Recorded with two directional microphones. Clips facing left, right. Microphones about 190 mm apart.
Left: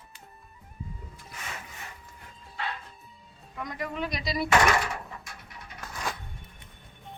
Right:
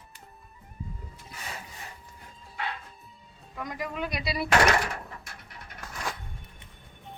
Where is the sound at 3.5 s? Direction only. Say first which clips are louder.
Even; centre (ahead or behind).